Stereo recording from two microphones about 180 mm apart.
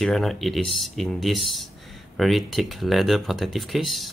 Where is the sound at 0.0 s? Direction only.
Centre (ahead or behind).